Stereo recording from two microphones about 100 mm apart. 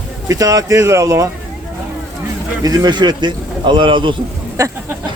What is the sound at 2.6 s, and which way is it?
A man's voice, 40° right (ahead or behind).